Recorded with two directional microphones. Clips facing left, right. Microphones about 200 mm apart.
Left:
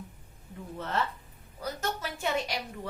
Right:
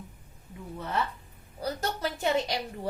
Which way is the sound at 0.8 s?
10° right (ahead or behind).